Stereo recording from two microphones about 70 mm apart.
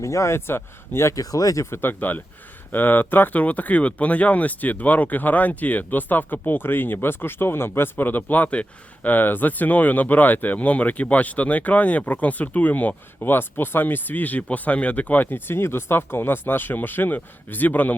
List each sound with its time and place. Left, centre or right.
0.0 s speech: left
1.1 s speech: left
1.7 s speech: left